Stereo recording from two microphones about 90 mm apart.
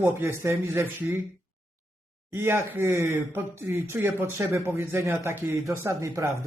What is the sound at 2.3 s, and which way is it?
A woman's voice, 30° right (ahead or behind).